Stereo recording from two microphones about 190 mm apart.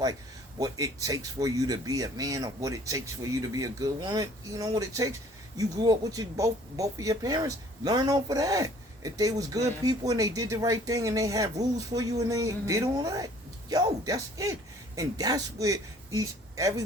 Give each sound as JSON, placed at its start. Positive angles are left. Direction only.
{"t": 0.6, "sound": "a man's voice", "side_deg": -20}